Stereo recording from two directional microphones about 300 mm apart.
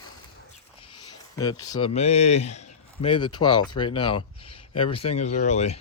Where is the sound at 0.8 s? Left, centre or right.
Centre.